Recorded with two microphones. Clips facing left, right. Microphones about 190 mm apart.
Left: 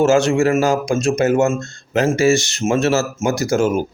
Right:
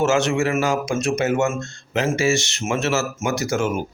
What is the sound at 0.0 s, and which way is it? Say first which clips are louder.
Speech: left 5 dB; 35° left (ahead or behind).